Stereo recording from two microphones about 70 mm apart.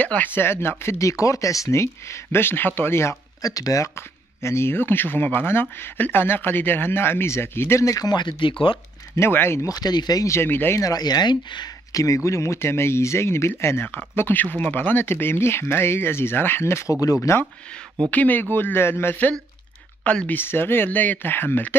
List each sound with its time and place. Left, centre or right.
0.0 s speech: left
3.4 s speech: left
4.4 s speech: left
7.8 s speech: left
9.1 s speech: left
9.7 s speech: left
10.2 s speech: left
10.8 s speech: left
11.9 s speech: left
17.0 s speech: left
18.1 s speech: left
20.0 s speech: centre
20.3 s speech: left